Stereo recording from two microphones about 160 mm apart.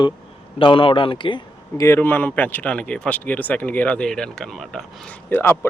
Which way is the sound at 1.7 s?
15° left (ahead or behind).